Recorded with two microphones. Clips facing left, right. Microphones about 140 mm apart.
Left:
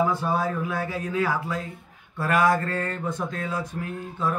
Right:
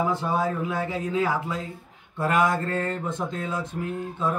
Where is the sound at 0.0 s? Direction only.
20° right (ahead or behind).